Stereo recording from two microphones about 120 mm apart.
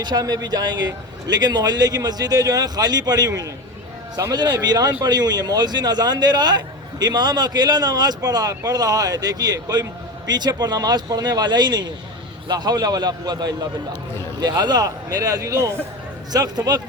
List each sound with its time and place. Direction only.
0.0 s a man's voice: 35° right (ahead or behind)